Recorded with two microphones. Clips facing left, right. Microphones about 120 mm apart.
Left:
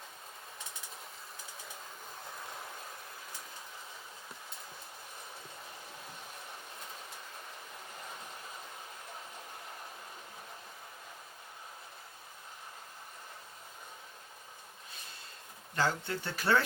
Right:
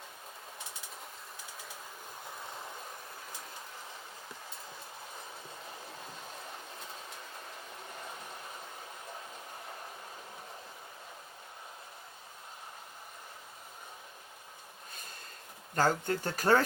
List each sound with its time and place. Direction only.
15.7 s speech: 45° right (ahead or behind)